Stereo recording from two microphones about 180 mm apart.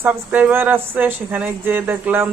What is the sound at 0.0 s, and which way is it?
Speech, 10° right (ahead or behind).